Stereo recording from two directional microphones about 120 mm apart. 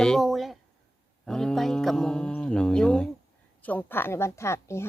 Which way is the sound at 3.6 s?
15° left (ahead or behind).